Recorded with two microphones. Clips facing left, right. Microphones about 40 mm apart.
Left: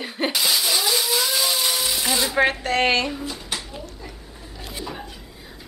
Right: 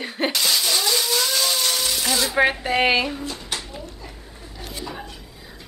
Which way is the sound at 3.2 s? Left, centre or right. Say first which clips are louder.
Even; centre.